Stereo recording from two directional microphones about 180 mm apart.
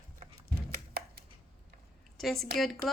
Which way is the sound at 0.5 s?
60° right (ahead or behind).